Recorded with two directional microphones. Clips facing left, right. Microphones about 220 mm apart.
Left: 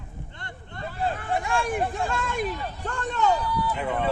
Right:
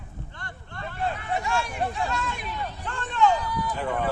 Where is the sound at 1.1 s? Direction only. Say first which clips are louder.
Left 1 dB; 50° left (ahead or behind).